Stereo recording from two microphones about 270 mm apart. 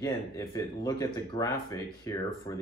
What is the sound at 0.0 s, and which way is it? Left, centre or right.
Speech, centre.